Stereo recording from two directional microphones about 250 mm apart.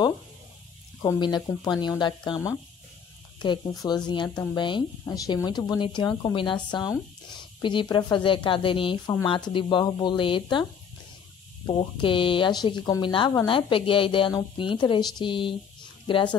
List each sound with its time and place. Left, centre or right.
1.0 s speech: centre